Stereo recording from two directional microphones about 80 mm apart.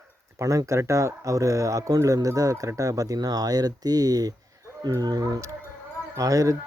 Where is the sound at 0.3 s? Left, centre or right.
Right.